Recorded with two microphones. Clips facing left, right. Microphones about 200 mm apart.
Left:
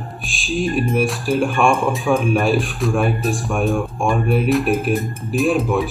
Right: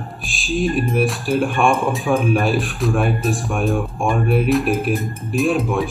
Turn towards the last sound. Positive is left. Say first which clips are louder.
# left 1 dB
turn(degrees=0)  # may be behind; listen again after turning